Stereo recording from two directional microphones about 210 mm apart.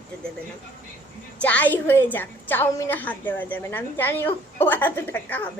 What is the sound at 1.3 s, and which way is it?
A woman's voice, 5° left (ahead or behind).